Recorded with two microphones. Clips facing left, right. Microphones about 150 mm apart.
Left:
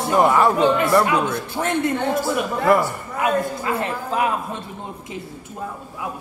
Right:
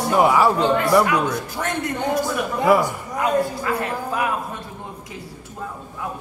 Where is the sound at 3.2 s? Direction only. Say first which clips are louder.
Even; 20° left (ahead or behind).